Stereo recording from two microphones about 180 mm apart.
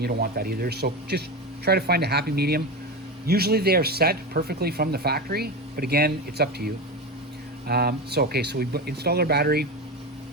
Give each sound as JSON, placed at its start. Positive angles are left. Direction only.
{"t": 0.0, "sound": "speech", "side_deg": -55}